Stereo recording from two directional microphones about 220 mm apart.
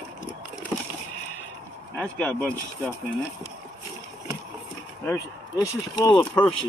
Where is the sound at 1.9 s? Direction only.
5° left (ahead or behind).